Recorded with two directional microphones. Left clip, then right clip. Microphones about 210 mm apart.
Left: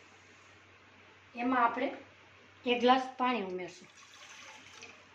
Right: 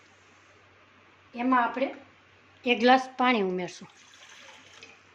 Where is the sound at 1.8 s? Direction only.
55° right (ahead or behind).